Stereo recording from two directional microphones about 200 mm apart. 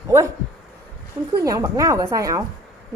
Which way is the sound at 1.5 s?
15° right (ahead or behind).